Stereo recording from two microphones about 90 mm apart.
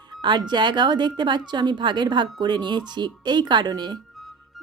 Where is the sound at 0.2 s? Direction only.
55° right (ahead or behind).